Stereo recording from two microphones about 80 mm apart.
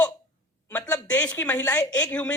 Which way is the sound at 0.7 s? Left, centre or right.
Centre.